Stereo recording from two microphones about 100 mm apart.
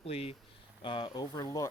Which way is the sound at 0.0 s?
80° left.